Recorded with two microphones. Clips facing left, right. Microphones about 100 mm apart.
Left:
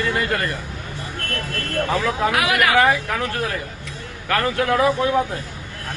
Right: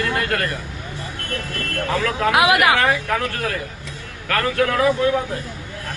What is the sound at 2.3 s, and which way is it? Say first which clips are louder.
Speech: right 7 dB; 20° right (ahead or behind).